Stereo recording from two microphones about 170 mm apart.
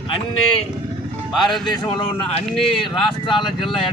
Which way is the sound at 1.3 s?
Centre (ahead or behind).